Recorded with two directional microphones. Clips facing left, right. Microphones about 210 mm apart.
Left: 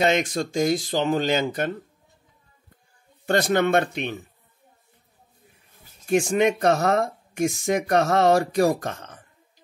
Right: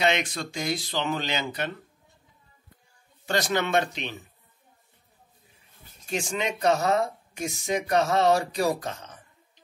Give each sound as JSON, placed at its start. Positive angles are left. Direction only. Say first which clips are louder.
{"t": 0.0, "sound": "speech", "louder": "left 4 dB", "side_deg": 45}
{"t": 3.3, "sound": "speech", "louder": "left 6 dB", "side_deg": 55}
{"t": 6.0, "sound": "speech", "louder": "left 10 dB", "side_deg": 55}